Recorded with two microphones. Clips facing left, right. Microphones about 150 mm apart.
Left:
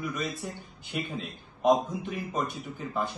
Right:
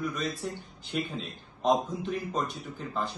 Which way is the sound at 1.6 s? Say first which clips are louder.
Left 2 dB; 10° left (ahead or behind).